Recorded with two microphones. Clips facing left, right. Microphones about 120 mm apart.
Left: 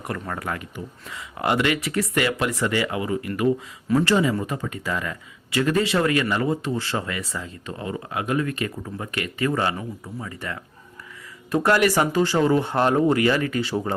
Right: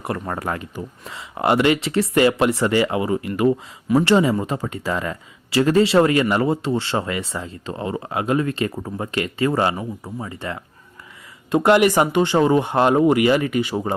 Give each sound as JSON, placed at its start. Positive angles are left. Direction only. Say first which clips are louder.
{"t": 0.0, "sound": "speech", "louder": "right 4 dB", "side_deg": -30}